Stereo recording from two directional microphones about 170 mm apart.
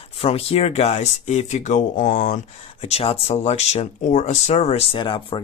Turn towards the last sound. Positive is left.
turn(degrees=30)  # may be behind; listen again after turning